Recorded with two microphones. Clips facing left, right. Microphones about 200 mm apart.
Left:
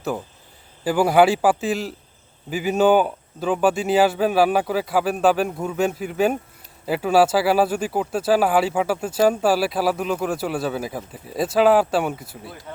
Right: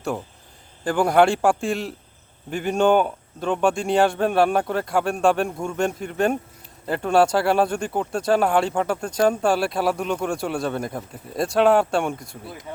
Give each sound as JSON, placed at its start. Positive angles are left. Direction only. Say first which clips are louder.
{"t": 0.9, "sound": "speech", "louder": "left 1 dB", "side_deg": 5}